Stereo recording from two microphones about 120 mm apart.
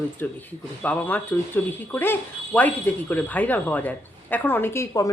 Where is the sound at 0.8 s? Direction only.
15° left (ahead or behind).